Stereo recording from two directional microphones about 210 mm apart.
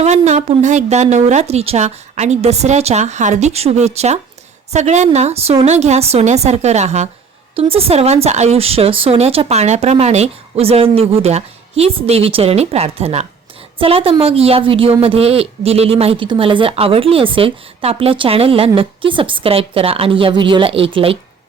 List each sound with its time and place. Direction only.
0.0 s a woman's voice: 30° right (ahead or behind)